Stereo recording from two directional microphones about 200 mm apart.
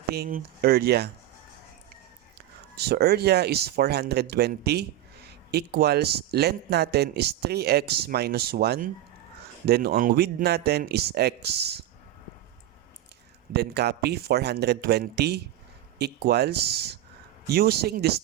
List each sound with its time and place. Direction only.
0.1 s speech: 45° right (ahead or behind)
2.7 s speech: 55° right (ahead or behind)
13.5 s speech: 55° right (ahead or behind)